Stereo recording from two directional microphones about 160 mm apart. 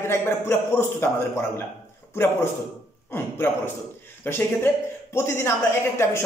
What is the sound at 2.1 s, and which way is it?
Speech, 15° left (ahead or behind).